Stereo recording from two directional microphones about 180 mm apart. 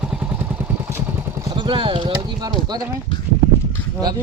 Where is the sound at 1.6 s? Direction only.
30° right (ahead or behind).